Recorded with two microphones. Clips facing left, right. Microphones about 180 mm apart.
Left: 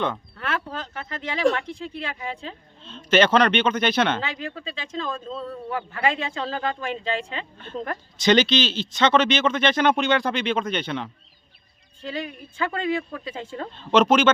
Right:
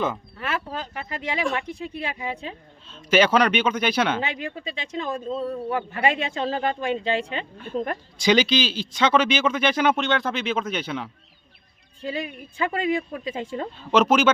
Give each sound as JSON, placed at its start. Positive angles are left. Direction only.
{"t": 0.0, "sound": "speech", "side_deg": -5}
{"t": 4.4, "sound": "speech", "side_deg": -20}